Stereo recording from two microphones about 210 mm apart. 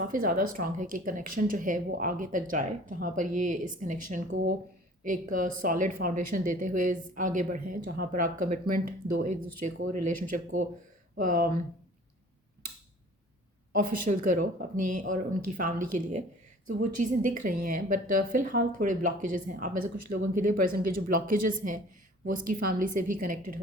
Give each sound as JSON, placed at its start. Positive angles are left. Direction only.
{"t": 0.0, "sound": "speech", "side_deg": -40}
{"t": 13.8, "sound": "speech", "side_deg": -40}